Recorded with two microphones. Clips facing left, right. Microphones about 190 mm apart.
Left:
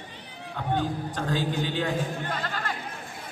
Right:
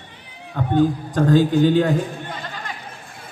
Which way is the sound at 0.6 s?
45° right (ahead or behind).